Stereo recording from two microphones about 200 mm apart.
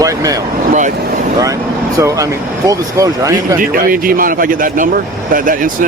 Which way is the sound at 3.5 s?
45° right (ahead or behind).